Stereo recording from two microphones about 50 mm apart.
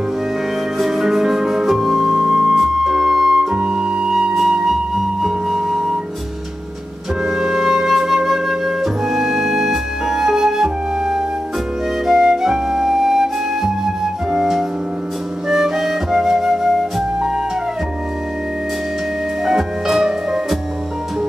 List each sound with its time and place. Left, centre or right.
0.7 s music: centre
3.5 s flute: centre
7.2 s music: centre
12.1 s flute: centre
14.3 s music: centre
15.4 s flute: centre
19.4 s music: centre